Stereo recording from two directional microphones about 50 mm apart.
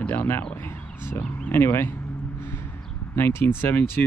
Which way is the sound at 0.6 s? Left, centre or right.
Left.